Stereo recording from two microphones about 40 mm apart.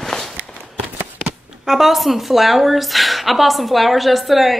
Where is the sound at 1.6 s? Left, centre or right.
Centre.